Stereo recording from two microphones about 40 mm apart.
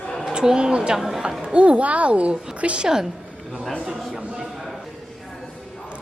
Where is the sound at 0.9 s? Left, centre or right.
Centre.